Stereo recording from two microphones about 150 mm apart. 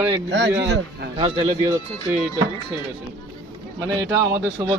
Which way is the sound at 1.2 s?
40° right (ahead or behind).